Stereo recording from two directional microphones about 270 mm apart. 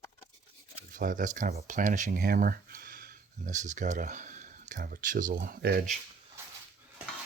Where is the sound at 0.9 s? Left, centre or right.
Right.